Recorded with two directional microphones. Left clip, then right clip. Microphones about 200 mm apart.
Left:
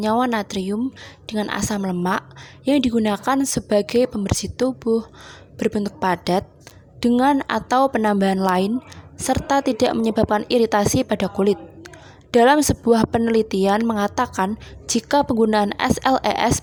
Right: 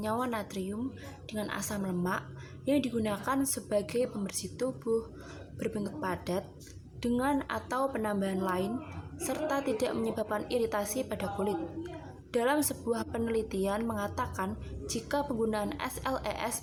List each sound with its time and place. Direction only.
0.0 s a woman's voice: 45° left (ahead or behind)